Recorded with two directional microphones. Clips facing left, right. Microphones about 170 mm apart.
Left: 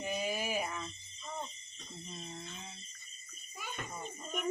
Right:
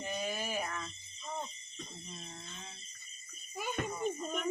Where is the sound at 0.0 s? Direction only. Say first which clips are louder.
Left 2 dB; 10° left (ahead or behind).